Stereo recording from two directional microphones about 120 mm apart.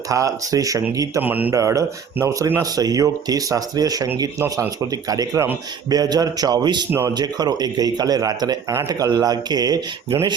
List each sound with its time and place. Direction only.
0.1 s speech: 25° right (ahead or behind)
1.2 s a man's voice: 15° right (ahead or behind)
1.5 s a man's voice: 25° right (ahead or behind)